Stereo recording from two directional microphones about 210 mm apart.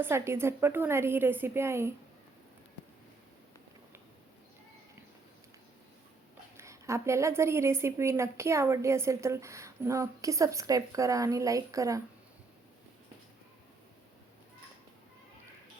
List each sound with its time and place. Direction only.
0.0 s a woman's voice: 10° right (ahead or behind)
6.6 s a woman's voice: 15° right (ahead or behind)